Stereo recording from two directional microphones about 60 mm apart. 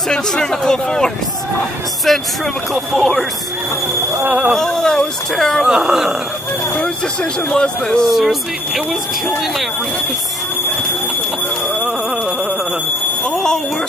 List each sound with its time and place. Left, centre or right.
0.1 s speech: centre
4.3 s speech: right
4.6 s speech: centre
5.6 s speech: centre
7.4 s speech: centre
8.1 s speech: centre
13.2 s a sound: centre